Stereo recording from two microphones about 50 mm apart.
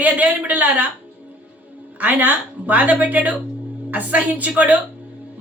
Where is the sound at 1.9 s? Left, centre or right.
Right.